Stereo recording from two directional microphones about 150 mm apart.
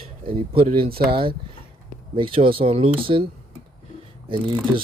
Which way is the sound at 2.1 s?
35° right (ahead or behind).